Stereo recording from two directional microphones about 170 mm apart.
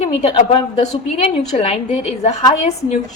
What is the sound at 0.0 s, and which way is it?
A woman's voice, 40° left (ahead or behind).